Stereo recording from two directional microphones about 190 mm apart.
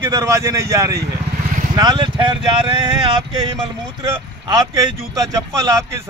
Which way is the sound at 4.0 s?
20° right (ahead or behind).